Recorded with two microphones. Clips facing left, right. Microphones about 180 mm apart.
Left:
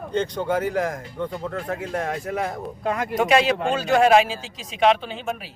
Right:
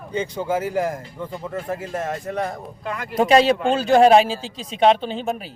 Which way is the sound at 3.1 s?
30° right (ahead or behind).